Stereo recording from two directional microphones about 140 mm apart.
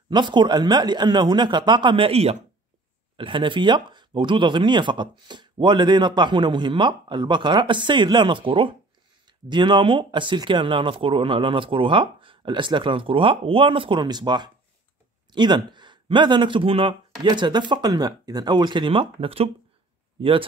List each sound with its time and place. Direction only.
0.1 s speech: 35° right (ahead or behind)